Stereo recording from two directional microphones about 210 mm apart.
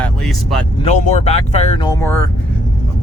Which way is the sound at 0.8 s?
35° left (ahead or behind).